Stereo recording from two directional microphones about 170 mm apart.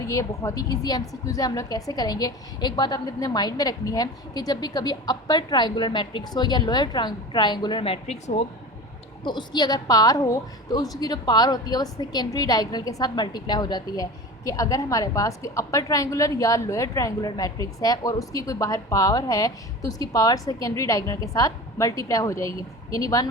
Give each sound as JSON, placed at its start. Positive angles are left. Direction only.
{"t": 0.1, "sound": "a woman's voice", "side_deg": 20}
{"t": 9.2, "sound": "a woman's voice", "side_deg": 25}